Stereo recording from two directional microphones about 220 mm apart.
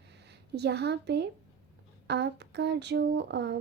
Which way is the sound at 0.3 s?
50° right (ahead or behind).